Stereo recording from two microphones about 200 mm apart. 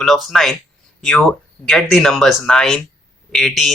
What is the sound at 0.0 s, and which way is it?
Speech, centre (ahead or behind).